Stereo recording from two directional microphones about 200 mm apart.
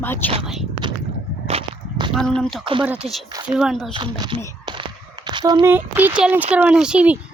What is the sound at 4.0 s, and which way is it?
Speech, 25° right (ahead or behind).